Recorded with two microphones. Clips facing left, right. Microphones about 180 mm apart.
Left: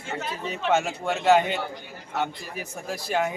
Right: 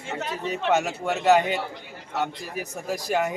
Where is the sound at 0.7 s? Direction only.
5° right (ahead or behind).